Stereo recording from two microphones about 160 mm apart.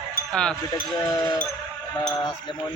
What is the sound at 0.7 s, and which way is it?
Speech, 25° left (ahead or behind).